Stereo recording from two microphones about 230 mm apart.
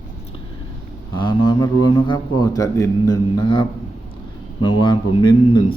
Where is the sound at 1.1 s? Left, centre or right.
Centre.